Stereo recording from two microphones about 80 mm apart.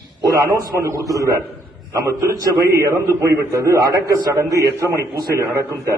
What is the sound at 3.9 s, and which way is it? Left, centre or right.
A man's voice, right.